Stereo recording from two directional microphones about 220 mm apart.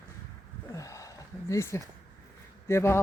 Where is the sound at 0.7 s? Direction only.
15° left (ahead or behind).